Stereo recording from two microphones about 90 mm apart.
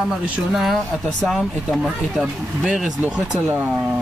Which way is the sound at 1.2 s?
Centre (ahead or behind).